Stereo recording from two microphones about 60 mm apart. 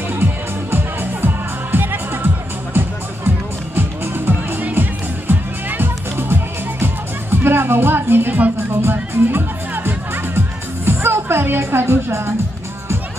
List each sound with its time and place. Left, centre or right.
0.1 s music: right
10.9 s music: right